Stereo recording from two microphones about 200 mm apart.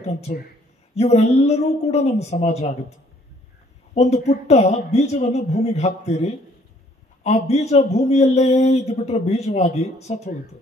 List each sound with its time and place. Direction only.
0.3 s a man's voice: 40° left (ahead or behind)
3.9 s a man's voice: 35° left (ahead or behind)